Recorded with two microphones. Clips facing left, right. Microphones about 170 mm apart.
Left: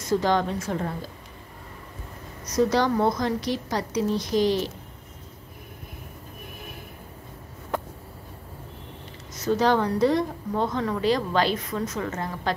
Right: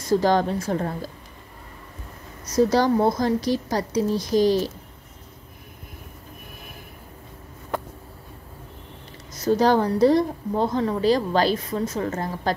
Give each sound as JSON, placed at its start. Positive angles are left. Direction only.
{"t": 0.1, "sound": "a woman's voice", "side_deg": -35}
{"t": 2.5, "sound": "a woman's voice", "side_deg": -35}
{"t": 9.3, "sound": "a woman's voice", "side_deg": -35}